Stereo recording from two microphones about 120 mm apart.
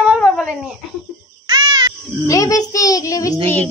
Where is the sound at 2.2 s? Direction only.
30° left (ahead or behind).